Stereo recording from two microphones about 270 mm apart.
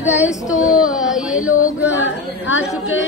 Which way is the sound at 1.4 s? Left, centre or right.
Left.